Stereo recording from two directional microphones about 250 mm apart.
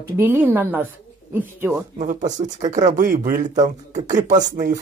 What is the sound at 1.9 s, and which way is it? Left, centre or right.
Speech, right.